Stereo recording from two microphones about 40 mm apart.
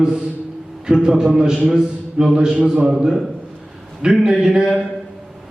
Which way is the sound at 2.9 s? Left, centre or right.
Centre.